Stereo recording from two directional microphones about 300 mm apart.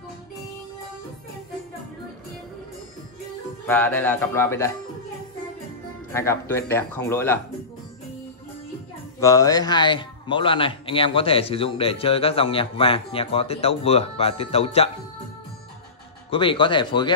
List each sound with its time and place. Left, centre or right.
3.6 s speech: centre
6.4 s speech: centre
9.2 s speech: centre
16.3 s speech: centre